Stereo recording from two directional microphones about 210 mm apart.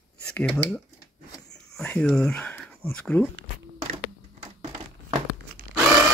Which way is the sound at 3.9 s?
25° right (ahead or behind).